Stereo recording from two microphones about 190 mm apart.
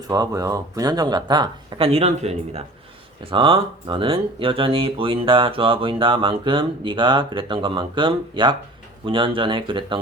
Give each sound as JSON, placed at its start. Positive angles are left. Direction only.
{"t": 0.1, "sound": "speech", "side_deg": -20}